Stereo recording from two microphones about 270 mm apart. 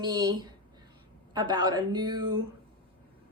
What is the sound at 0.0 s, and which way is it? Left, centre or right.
A woman's voice, centre.